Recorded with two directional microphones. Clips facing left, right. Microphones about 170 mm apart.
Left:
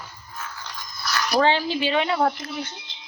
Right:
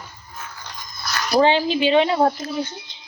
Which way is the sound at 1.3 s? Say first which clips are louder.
Right 4 dB; 20° right (ahead or behind).